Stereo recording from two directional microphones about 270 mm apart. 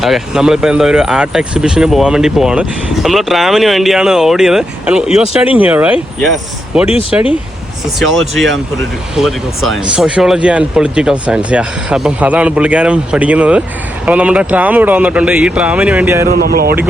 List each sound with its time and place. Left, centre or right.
0.0 s speech: centre
16.2 s speech: right